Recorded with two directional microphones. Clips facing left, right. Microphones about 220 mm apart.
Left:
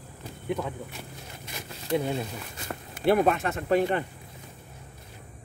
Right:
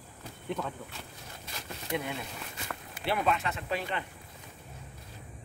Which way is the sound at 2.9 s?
45° left (ahead or behind).